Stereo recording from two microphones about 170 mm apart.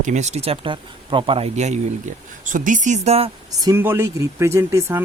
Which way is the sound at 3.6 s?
15° right (ahead or behind).